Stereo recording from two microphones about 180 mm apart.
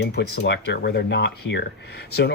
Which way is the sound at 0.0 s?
65° left (ahead or behind).